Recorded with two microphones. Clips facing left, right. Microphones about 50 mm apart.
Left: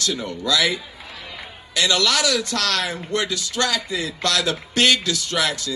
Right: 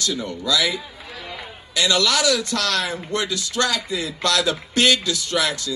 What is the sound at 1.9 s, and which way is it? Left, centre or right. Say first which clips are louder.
A man's voice: right 1 dB; left.